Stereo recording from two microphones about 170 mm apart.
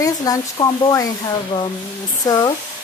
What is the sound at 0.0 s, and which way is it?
Speech, 20° left (ahead or behind).